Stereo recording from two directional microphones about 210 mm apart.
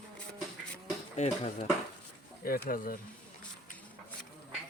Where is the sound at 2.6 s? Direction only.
40° left (ahead or behind).